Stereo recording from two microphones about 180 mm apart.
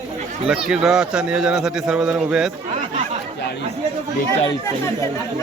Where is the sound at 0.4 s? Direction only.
5° right (ahead or behind).